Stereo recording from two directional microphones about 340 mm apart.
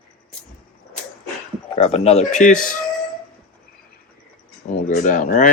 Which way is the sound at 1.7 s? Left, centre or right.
Centre.